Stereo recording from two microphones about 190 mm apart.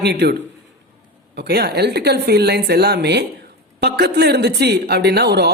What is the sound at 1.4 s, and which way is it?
Speech, 60° right (ahead or behind).